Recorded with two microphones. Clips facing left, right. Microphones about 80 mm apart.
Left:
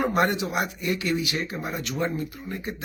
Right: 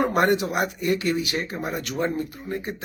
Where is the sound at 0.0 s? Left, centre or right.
Right.